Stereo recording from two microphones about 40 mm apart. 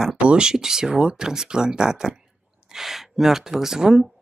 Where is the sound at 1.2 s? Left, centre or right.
Centre.